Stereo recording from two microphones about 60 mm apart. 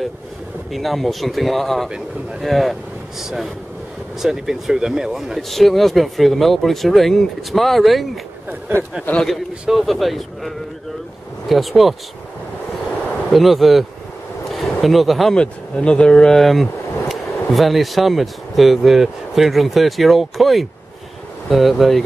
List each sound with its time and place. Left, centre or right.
0.7 s speech: centre
8.7 s speech: right
9.1 s a man's voice: left
9.7 s speech: centre
13.3 s speech: centre
14.5 s a sound: centre
15.3 s speech: centre